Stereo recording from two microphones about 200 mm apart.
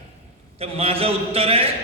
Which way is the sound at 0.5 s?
30° right (ahead or behind).